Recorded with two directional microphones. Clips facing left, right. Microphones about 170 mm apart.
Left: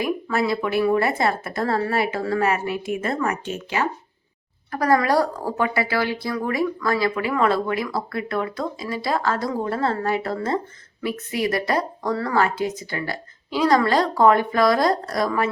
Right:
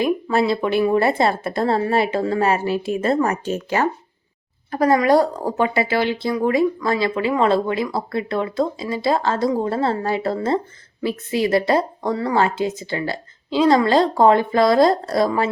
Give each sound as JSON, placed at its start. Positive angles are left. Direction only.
{"t": 0.0, "sound": "speech", "side_deg": -25}
{"t": 4.7, "sound": "speech", "side_deg": -25}